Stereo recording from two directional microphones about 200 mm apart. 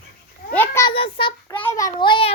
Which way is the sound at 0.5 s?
10° left (ahead or behind).